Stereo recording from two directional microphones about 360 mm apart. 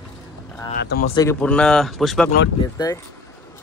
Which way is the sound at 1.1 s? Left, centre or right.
Centre.